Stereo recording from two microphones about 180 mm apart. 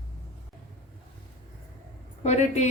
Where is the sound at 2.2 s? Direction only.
40° left (ahead or behind).